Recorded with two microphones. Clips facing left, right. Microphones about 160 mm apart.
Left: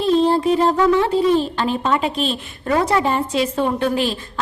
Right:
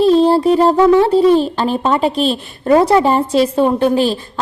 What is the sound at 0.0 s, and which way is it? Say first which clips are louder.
A woman's voice: right 5 dB; 35° right (ahead or behind).